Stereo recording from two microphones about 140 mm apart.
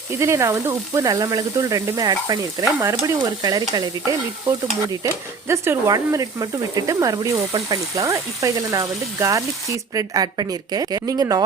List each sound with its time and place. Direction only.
0.1 s speech: 20° right (ahead or behind)
4.9 s speech: 20° right (ahead or behind)